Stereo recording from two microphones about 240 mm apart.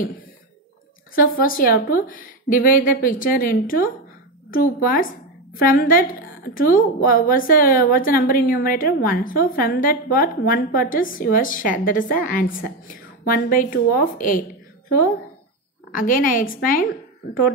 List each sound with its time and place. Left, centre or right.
1.1 s a woman's voice: left
15.9 s a woman's voice: left